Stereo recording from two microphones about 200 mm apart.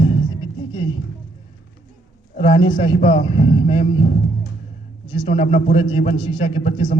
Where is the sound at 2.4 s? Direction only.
25° left (ahead or behind).